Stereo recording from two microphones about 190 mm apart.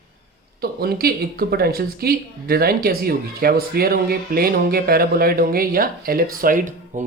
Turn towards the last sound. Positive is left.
turn(degrees=-45)  # may be behind; listen again after turning